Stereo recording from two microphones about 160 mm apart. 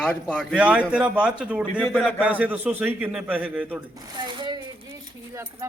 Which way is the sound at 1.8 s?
5° left (ahead or behind).